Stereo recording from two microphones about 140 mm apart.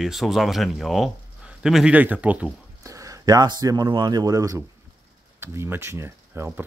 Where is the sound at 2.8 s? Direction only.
25° right (ahead or behind).